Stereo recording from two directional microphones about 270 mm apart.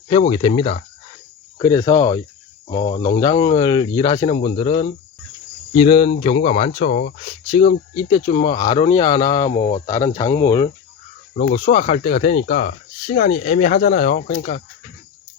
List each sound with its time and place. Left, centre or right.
0.1 s speech: centre
9.8 s speech: centre
11.3 s speech: left